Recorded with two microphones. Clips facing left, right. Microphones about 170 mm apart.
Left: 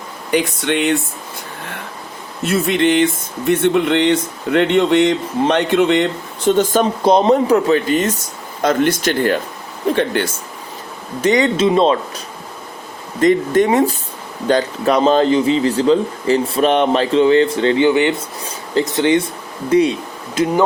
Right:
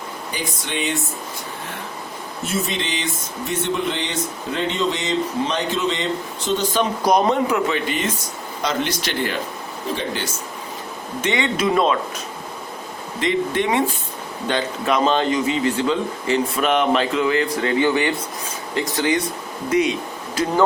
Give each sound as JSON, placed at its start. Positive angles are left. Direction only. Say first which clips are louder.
{"t": 0.3, "sound": "speech", "louder": "left 13 dB", "side_deg": 75}
{"t": 2.4, "sound": "speech", "louder": "left 10 dB", "side_deg": 65}
{"t": 7.0, "sound": "speech", "louder": "left 5 dB", "side_deg": 25}
{"t": 9.9, "sound": "speech", "louder": "left 8 dB", "side_deg": 60}
{"t": 11.2, "sound": "speech", "louder": "left 8 dB", "side_deg": 40}
{"t": 11.5, "sound": "speech", "louder": "left 5 dB", "side_deg": 25}
{"t": 13.1, "sound": "speech", "louder": "left 8 dB", "side_deg": 45}
{"t": 20.3, "sound": "speech", "louder": "left 3 dB", "side_deg": 20}